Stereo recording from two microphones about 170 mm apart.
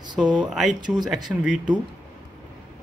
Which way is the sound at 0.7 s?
25° right (ahead or behind).